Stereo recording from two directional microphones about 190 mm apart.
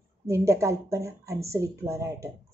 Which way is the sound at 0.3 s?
15° right (ahead or behind).